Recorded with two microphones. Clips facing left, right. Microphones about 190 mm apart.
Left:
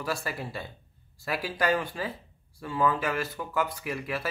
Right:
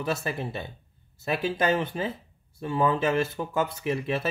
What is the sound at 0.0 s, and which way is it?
Speech, 20° right (ahead or behind).